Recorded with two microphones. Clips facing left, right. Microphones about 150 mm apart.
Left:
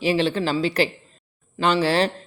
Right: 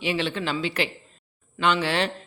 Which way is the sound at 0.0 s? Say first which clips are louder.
Left 6 dB; 35° left (ahead or behind).